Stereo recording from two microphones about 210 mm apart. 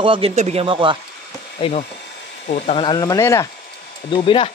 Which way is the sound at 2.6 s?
25° left (ahead or behind).